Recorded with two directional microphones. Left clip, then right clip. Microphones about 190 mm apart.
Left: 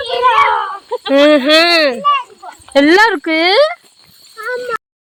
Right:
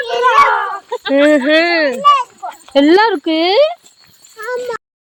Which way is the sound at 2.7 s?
15° right (ahead or behind).